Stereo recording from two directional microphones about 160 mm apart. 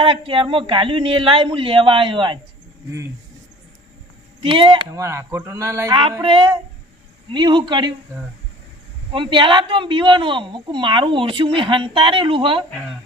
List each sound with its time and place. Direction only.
0.0 s a child's voice: 35° right (ahead or behind)
4.4 s a child's voice: 35° right (ahead or behind)
4.9 s speech: 20° right (ahead or behind)
5.9 s a child's voice: 30° right (ahead or behind)
9.1 s a child's voice: 30° right (ahead or behind)